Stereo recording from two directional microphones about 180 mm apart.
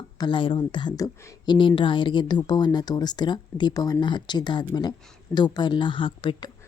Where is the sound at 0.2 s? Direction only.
25° left (ahead or behind).